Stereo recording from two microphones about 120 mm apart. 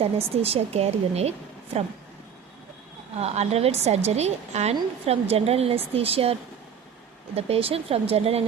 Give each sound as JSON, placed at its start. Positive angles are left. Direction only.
{"t": 0.0, "sound": "a woman's voice", "side_deg": -55}
{"t": 3.2, "sound": "a woman's voice", "side_deg": -60}
{"t": 7.3, "sound": "a woman's voice", "side_deg": -55}